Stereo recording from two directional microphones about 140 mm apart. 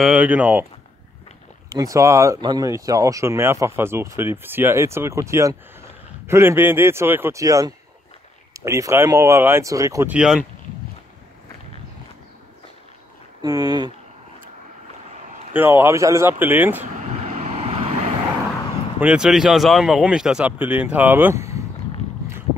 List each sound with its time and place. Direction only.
0.0 s speech: 10° right (ahead or behind)
1.7 s speech: 25° right (ahead or behind)
10.0 s speech: 5° right (ahead or behind)
13.4 s speech: 25° right (ahead or behind)
15.5 s speech: 15° right (ahead or behind)
16.8 s vehicle: 55° right (ahead or behind)
18.9 s speech: 5° right (ahead or behind)